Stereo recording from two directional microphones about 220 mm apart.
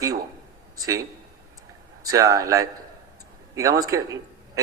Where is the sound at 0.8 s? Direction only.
15° right (ahead or behind).